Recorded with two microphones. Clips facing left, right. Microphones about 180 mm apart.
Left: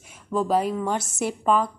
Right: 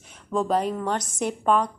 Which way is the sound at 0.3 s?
5° left (ahead or behind).